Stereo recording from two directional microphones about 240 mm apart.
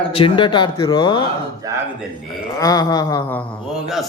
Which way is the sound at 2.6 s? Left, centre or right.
Centre.